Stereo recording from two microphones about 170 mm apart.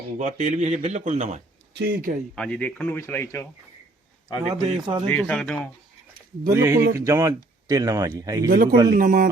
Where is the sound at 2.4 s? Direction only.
10° left (ahead or behind).